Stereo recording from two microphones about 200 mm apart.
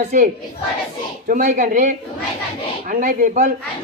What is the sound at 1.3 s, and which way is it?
Speech, 40° right (ahead or behind).